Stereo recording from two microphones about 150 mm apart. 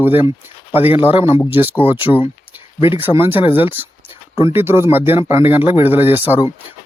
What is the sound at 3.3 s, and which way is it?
Speech, 35° left (ahead or behind).